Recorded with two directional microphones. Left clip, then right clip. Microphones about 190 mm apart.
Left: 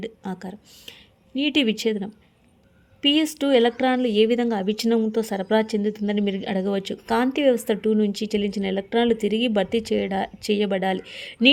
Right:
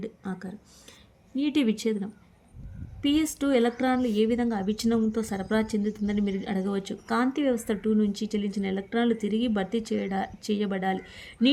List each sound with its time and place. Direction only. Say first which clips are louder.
0.0 s speech: left 4 dB; 25° left (ahead or behind)